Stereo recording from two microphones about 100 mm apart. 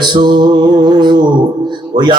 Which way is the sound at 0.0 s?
45° right (ahead or behind).